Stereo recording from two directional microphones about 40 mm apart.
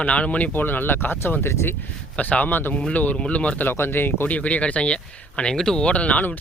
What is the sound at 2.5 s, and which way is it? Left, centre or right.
Speech, left.